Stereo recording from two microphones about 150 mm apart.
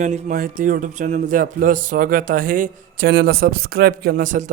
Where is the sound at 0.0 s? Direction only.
50° right (ahead or behind).